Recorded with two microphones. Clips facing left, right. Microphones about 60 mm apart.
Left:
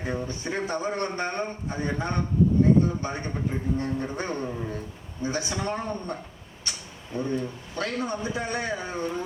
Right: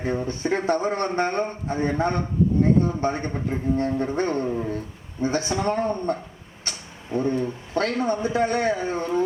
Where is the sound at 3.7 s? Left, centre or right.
Right.